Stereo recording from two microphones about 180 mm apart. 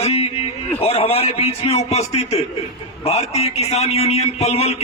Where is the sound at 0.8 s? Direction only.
35° left (ahead or behind).